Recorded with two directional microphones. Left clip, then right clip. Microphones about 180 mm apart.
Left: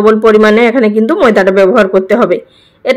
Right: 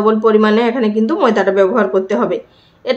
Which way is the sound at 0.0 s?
30° left (ahead or behind).